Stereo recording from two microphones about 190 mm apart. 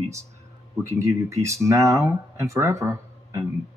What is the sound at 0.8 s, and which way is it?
Speech, 15° right (ahead or behind).